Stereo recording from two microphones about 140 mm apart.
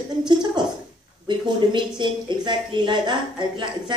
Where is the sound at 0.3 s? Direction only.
30° right (ahead or behind).